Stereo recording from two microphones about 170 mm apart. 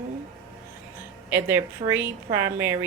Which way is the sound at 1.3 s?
15° right (ahead or behind).